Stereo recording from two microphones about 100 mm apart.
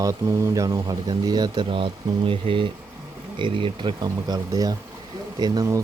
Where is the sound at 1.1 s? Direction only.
45° right (ahead or behind).